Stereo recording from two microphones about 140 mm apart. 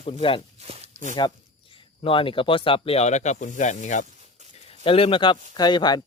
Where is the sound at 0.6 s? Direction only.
45° right (ahead or behind).